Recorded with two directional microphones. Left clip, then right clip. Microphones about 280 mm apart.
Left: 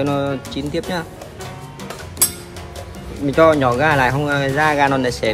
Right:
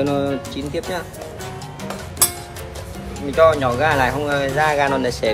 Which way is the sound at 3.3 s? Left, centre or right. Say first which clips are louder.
Left 1 dB; left.